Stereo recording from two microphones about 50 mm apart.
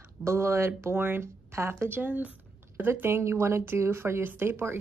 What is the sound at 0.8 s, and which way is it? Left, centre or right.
Speech, right.